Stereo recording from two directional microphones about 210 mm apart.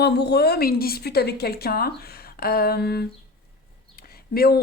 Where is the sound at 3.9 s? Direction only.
45° left (ahead or behind).